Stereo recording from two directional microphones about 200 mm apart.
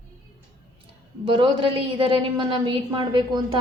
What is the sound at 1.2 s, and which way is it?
A woman's voice, 25° right (ahead or behind).